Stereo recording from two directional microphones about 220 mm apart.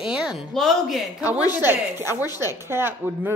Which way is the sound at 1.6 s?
10° right (ahead or behind).